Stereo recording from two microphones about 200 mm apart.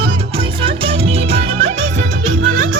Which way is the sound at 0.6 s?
25° right (ahead or behind).